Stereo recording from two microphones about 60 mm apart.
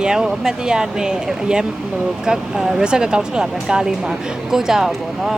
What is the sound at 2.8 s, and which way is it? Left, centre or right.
Speech, centre.